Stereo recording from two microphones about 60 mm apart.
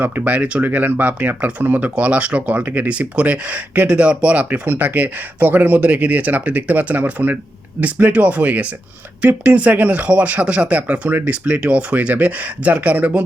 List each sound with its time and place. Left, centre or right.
0.0 s speech: right